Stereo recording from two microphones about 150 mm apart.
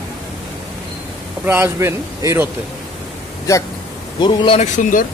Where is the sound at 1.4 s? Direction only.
15° right (ahead or behind).